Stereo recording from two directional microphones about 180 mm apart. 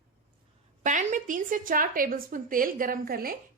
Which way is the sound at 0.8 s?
45° right (ahead or behind).